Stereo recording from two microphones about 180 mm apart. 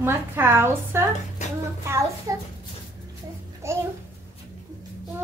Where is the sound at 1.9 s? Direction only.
15° right (ahead or behind).